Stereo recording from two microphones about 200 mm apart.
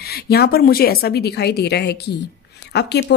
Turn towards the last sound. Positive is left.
turn(degrees=55)  # may be behind; listen again after turning